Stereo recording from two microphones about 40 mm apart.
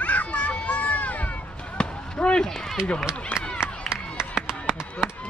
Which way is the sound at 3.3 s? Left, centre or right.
Left.